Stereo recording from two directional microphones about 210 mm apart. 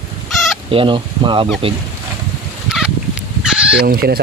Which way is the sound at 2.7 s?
5° right (ahead or behind).